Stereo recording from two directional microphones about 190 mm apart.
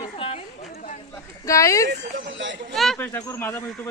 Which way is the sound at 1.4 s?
15° left (ahead or behind).